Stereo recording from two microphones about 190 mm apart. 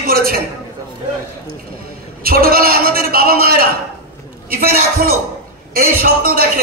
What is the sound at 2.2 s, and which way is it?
A man's voice, 50° right (ahead or behind).